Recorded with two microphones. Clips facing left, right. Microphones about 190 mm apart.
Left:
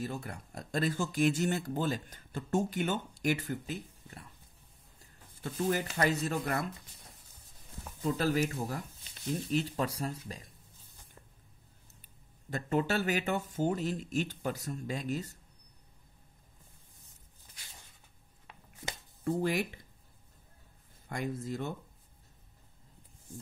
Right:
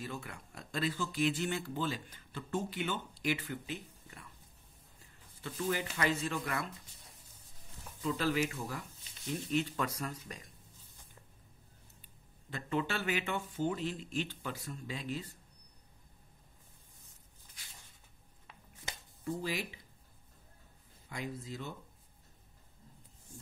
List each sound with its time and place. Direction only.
0.0 s speech: 40° left (ahead or behind)
5.4 s speech: 45° left (ahead or behind)
8.0 s speech: 45° left (ahead or behind)
12.4 s speech: 45° left (ahead or behind)
19.2 s speech: 55° left (ahead or behind)
21.1 s speech: 50° left (ahead or behind)